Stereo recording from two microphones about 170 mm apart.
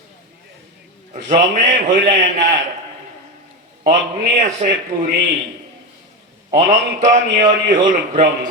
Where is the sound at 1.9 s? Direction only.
50° right (ahead or behind).